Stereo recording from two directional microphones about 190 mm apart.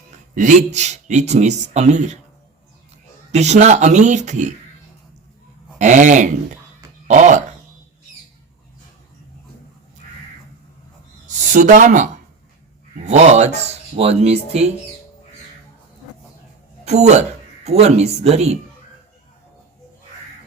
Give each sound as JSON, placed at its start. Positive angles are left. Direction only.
{"t": 0.3, "sound": "speech", "side_deg": -40}
{"t": 3.3, "sound": "speech", "side_deg": -35}
{"t": 5.8, "sound": "speech", "side_deg": -40}
{"t": 11.3, "sound": "speech", "side_deg": -40}
{"t": 16.8, "sound": "speech", "side_deg": -35}